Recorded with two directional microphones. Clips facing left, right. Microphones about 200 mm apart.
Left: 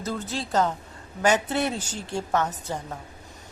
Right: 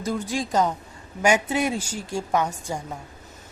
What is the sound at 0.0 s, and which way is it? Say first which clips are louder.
A woman's voice: right 4 dB; 10° right (ahead or behind).